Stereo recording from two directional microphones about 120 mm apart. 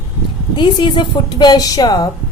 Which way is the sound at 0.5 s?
40° left (ahead or behind).